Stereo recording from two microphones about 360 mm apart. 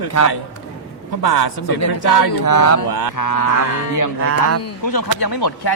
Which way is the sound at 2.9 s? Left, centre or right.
Left.